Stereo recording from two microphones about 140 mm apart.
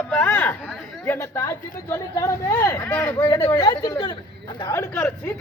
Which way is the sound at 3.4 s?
25° left (ahead or behind).